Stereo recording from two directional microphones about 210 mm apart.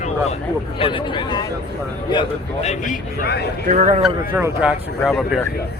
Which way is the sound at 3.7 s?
35° right (ahead or behind).